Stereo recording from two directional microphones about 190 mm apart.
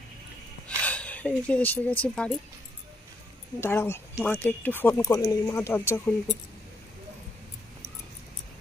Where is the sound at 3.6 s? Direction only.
10° left (ahead or behind).